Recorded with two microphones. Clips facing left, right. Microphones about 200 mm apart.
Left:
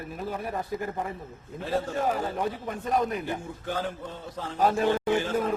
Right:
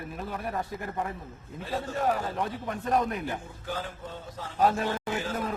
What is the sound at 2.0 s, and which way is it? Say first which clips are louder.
A man's voice: left 1 dB; centre (ahead or behind).